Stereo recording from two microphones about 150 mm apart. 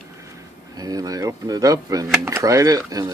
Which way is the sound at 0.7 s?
25° right (ahead or behind).